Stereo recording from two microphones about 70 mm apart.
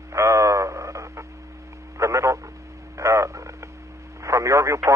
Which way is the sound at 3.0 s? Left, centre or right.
Right.